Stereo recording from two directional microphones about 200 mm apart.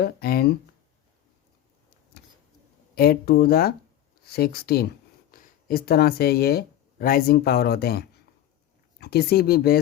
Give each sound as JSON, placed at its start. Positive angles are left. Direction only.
{"t": 0.0, "sound": "speech", "side_deg": 50}
{"t": 2.1, "sound": "vehicle", "side_deg": 50}
{"t": 2.9, "sound": "speech", "side_deg": 50}